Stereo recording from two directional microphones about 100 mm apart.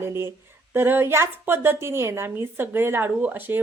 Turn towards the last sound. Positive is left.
turn(degrees=-20)  # may be behind; listen again after turning